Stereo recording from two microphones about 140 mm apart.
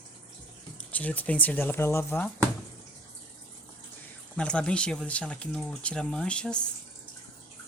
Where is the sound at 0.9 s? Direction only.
10° left (ahead or behind).